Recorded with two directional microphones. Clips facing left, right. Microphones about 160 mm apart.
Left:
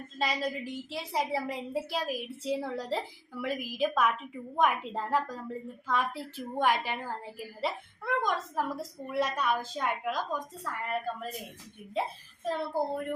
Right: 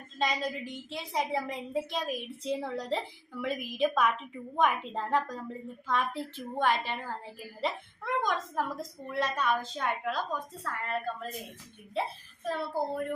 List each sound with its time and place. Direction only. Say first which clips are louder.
0.2 s a woman's voice: even; 5° left (ahead or behind)
12.5 s speech: left 1 dB; 20° left (ahead or behind)